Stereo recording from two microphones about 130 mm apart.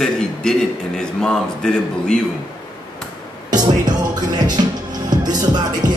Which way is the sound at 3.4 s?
30° right (ahead or behind).